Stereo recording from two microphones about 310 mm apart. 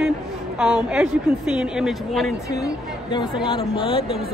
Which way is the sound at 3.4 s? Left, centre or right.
Centre.